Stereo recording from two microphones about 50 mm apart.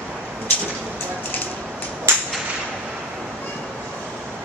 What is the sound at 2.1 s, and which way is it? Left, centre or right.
Whip, right.